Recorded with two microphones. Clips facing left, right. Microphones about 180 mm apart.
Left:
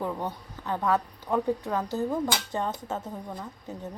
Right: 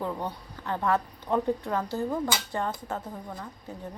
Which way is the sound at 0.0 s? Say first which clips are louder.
Left 1 dB; 15° left (ahead or behind).